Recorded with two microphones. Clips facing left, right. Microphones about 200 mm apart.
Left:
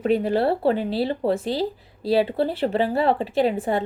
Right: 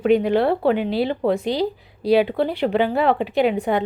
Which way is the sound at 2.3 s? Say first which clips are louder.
Right 2 dB; 30° left (ahead or behind).